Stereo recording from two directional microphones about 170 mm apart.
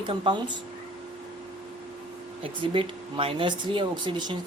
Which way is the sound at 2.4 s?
30° right (ahead or behind).